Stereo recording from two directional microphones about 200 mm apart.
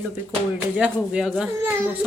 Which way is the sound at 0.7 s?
5° right (ahead or behind).